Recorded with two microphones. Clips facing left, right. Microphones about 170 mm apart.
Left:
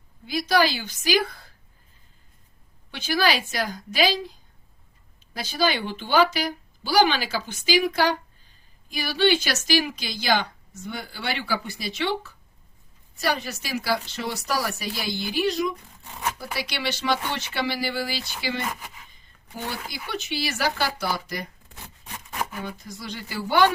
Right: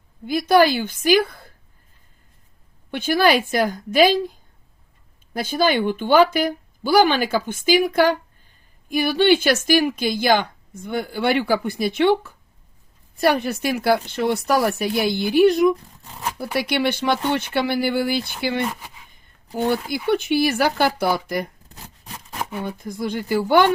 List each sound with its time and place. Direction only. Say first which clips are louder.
0.3 s a woman's voice: right 6 dB; 50° right (ahead or behind)
2.9 s a woman's voice: right 6 dB; 55° right (ahead or behind)
18.7 s speech: right 1 dB; 5° right (ahead or behind)
19.6 s speech: right 13 dB; 55° right (ahead or behind)
22.6 s a woman's voice: right 9 dB; 55° right (ahead or behind)